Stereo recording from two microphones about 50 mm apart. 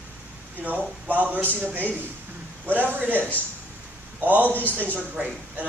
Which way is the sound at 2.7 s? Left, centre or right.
Right.